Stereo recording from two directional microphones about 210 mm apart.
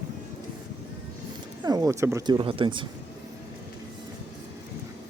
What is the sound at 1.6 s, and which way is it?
Speech, 15° right (ahead or behind).